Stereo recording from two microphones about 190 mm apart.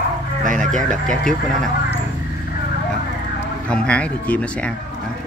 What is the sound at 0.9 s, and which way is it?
Speech, 5° left (ahead or behind).